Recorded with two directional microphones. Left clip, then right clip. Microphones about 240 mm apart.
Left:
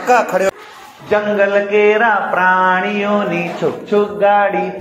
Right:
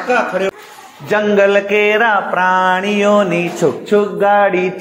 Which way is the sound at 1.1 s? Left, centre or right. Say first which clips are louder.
Right 2 dB; right.